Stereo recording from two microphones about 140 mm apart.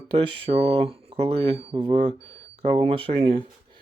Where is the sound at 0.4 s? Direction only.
45° right (ahead or behind).